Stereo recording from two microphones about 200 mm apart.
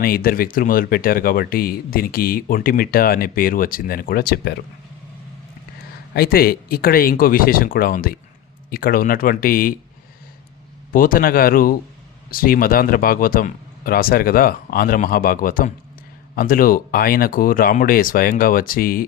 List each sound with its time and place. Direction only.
0.0 s speech: 45° left (ahead or behind)
6.1 s speech: 50° left (ahead or behind)
10.9 s speech: 45° left (ahead or behind)